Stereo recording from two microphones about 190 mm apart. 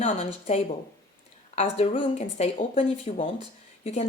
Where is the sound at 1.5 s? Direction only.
35° left (ahead or behind).